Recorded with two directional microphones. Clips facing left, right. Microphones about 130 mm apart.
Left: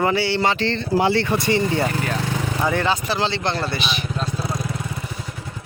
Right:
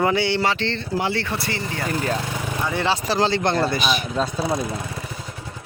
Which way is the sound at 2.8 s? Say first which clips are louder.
Right 1 dB; 35° right (ahead or behind).